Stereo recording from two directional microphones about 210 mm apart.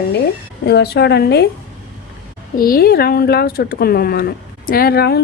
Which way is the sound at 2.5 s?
45° left (ahead or behind).